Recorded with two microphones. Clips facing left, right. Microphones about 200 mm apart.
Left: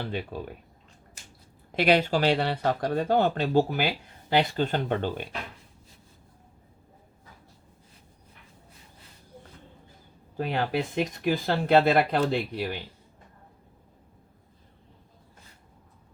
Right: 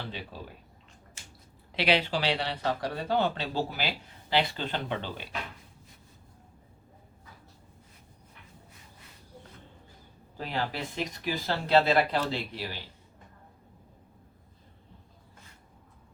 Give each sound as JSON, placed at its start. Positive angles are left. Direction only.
{"t": 0.3, "sound": "speech", "side_deg": 55}
{"t": 1.7, "sound": "speech", "side_deg": 50}
{"t": 10.3, "sound": "speech", "side_deg": 55}